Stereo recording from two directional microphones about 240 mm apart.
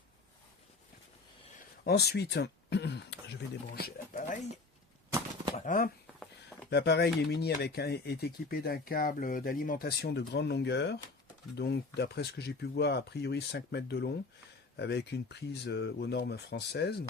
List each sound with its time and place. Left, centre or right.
1.8 s speech: left
3.8 s pigeon: left
5.5 s speech: left
6.7 s speech: left